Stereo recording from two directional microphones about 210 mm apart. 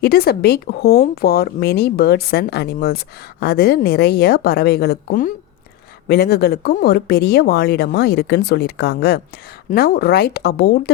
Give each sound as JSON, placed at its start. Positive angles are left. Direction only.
{"t": 0.0, "sound": "speech", "side_deg": 50}